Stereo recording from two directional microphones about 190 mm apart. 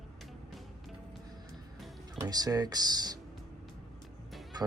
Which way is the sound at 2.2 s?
20° right (ahead or behind).